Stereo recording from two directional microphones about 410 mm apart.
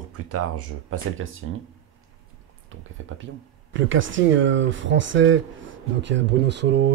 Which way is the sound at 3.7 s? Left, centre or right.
Right.